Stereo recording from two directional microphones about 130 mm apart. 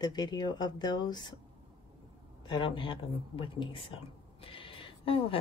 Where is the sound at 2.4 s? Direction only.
35° left (ahead or behind).